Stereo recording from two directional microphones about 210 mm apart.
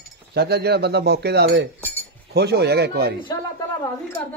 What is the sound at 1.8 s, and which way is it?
Cutlery, 10° left (ahead or behind).